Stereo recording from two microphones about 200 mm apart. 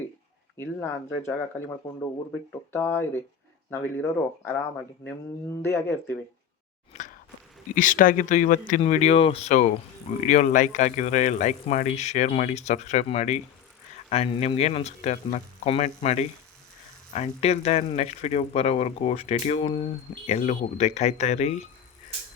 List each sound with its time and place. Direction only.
0.5 s speech: 10° left (ahead or behind)
6.9 s a sound: 35° left (ahead or behind)
7.8 s a man's voice: 40° left (ahead or behind)